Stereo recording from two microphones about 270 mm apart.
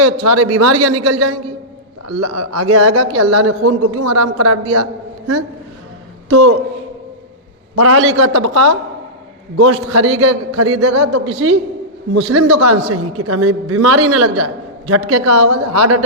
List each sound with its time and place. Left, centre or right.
0.0 s a man's voice: right
6.2 s a man's voice: right
7.8 s a man's voice: right